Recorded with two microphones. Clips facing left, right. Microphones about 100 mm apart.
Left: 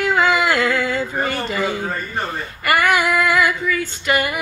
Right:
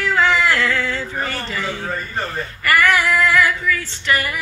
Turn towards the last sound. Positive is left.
turn(degrees=20)  # may be behind; listen again after turning